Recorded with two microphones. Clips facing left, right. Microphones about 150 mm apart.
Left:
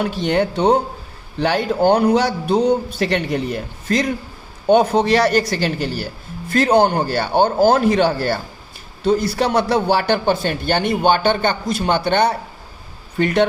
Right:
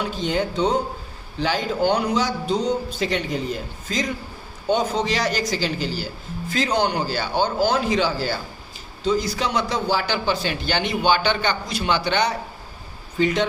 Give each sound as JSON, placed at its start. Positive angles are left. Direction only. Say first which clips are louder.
{"t": 0.0, "sound": "a man's voice", "louder": "left 5 dB", "side_deg": 65}